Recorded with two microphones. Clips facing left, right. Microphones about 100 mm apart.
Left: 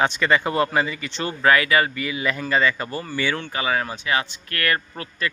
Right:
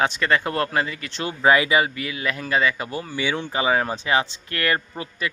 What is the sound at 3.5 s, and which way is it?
Speech, 25° right (ahead or behind).